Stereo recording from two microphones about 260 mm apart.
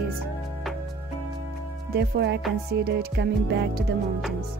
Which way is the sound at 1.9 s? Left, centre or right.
Right.